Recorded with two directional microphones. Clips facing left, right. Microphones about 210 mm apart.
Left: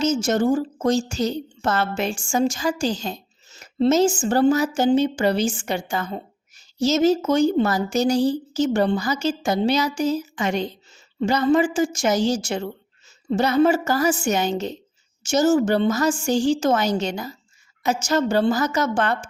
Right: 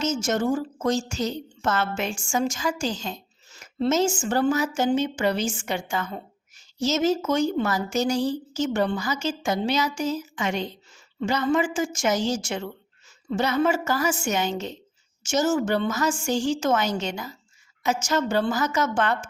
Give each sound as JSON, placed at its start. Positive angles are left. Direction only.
{"t": 0.0, "sound": "a woman's voice", "side_deg": 35}